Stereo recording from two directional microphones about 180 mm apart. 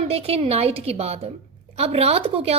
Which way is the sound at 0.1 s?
35° right (ahead or behind).